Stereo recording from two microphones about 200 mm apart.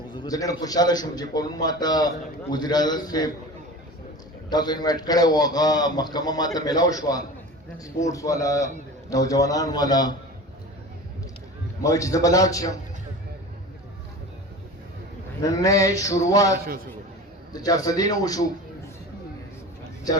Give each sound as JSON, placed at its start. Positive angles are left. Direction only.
{"t": 0.1, "sound": "a man's voice", "side_deg": 20}
{"t": 4.4, "sound": "a man's voice", "side_deg": 20}
{"t": 11.8, "sound": "a man's voice", "side_deg": 15}
{"t": 15.4, "sound": "a man's voice", "side_deg": 15}